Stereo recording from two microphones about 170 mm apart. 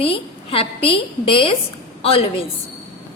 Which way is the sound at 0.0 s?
35° left (ahead or behind).